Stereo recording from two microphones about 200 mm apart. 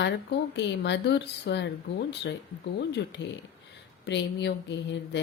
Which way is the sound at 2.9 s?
60° left (ahead or behind).